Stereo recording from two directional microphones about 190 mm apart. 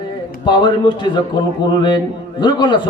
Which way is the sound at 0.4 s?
25° left (ahead or behind).